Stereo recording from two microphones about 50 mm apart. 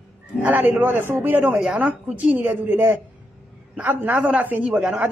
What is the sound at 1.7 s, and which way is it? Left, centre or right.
Speech, right.